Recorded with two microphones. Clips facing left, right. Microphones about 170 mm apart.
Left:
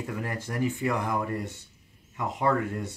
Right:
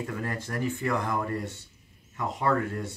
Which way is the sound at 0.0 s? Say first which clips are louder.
Even; 15° left (ahead or behind).